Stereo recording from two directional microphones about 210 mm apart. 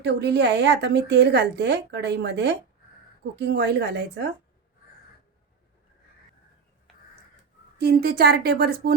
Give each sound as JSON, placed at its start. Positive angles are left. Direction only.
{"t": 0.0, "sound": "a woman's voice", "side_deg": -55}
{"t": 7.8, "sound": "a woman's voice", "side_deg": -50}